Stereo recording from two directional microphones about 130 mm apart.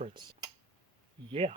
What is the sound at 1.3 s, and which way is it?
Speech, 50° right (ahead or behind).